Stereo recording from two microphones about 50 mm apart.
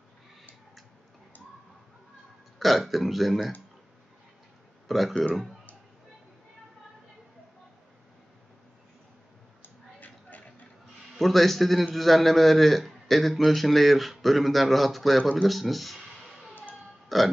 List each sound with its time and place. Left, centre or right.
2.6 s a man's voice: centre
4.8 s speech: centre
9.6 s a sound: left
11.1 s a man's voice: centre